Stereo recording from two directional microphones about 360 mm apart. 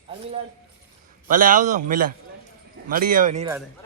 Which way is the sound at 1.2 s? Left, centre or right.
Right.